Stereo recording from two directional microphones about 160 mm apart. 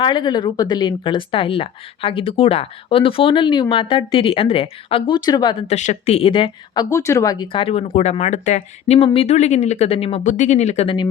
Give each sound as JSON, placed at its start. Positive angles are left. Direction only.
{"t": 0.0, "sound": "speech", "side_deg": 30}
{"t": 5.7, "sound": "speech", "side_deg": 45}
{"t": 6.9, "sound": "speech", "side_deg": 20}